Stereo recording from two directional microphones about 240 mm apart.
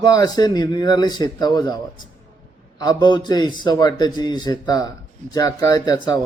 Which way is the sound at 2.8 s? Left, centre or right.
Centre.